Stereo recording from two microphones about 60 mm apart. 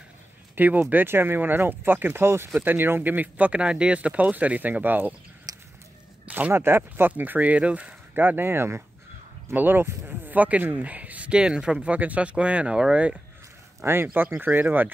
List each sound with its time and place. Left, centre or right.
0.6 s speech: right
5.5 s a sound: right
6.2 s a sound: right
6.5 s speech: right
8.1 s speech: right
13.8 s speech: right